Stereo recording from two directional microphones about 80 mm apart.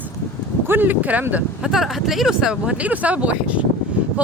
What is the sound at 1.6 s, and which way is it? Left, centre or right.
Speech, centre.